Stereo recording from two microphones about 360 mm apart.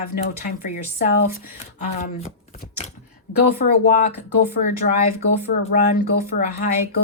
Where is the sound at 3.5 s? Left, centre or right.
Left.